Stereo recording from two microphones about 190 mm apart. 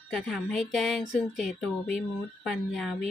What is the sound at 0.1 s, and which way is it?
Speech, centre (ahead or behind).